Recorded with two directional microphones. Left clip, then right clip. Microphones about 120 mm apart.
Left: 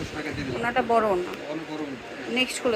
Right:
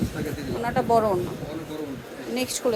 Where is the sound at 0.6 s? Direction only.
25° right (ahead or behind).